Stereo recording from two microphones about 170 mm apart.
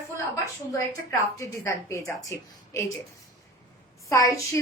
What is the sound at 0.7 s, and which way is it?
A woman's voice, 20° left (ahead or behind).